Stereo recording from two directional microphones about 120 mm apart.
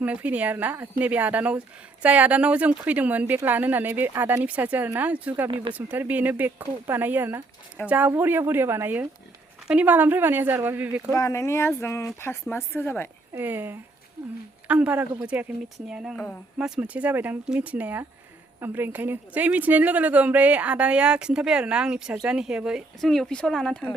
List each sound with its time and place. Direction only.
0.0 s a woman's voice: 10° right (ahead or behind)
11.2 s speech: 25° left (ahead or behind)
13.3 s a woman's voice: 15° right (ahead or behind)
16.1 s speech: 5° left (ahead or behind)
16.6 s a woman's voice: 5° right (ahead or behind)